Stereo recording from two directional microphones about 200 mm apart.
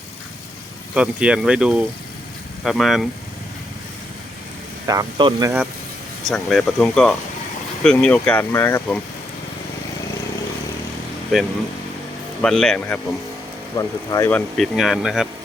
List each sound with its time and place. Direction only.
0.9 s speech: 5° right (ahead or behind)
4.9 s speech: 20° right (ahead or behind)
6.2 s speech: centre (ahead or behind)
11.3 s speech: centre (ahead or behind)
13.7 s speech: 15° left (ahead or behind); by 15.3 s centre (ahead or behind)